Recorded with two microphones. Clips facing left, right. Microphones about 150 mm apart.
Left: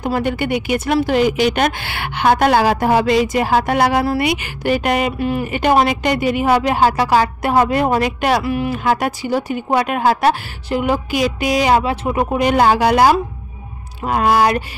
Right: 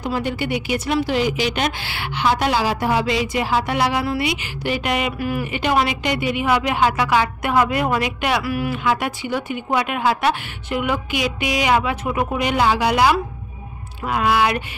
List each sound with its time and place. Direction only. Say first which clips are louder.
0.0 s a woman's voice: left 4 dB; 55° left (ahead or behind)
4.2 s a woman's voice: left 4 dB; 50° left (ahead or behind)
8.5 s a woman's voice: left 3 dB; 25° left (ahead or behind)
8.7 s a woman's voice: left 4 dB; 40° left (ahead or behind)